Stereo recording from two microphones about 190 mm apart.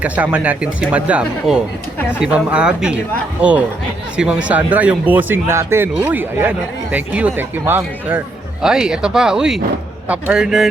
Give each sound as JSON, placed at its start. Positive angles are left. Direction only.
{"t": 0.0, "sound": "speech", "side_deg": -5}